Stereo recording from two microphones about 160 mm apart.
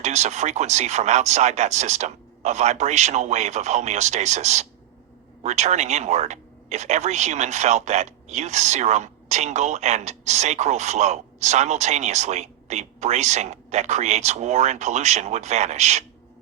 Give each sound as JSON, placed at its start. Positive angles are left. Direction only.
{"t": 0.0, "sound": "speech", "side_deg": -45}